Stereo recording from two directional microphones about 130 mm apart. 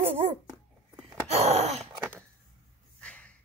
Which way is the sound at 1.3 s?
55° right (ahead or behind).